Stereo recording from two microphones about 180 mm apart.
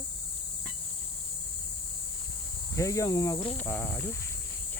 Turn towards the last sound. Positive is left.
turn(degrees=10)  # may be behind; listen again after turning